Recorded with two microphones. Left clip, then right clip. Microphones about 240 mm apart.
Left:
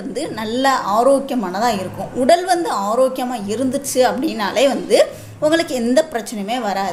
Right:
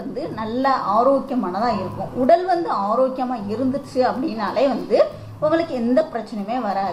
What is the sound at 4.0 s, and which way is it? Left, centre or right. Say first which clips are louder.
A woman's voice: left 4 dB; left.